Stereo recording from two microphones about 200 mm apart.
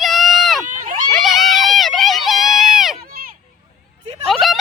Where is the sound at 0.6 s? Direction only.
40° right (ahead or behind).